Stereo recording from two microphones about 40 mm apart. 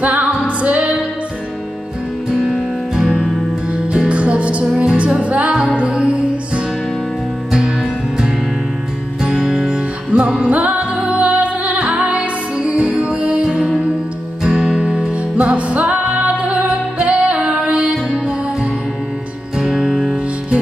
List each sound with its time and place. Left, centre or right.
0.0 s music: right
2.3 s music: centre
9.2 s music: centre
9.7 s music: right
14.4 s music: centre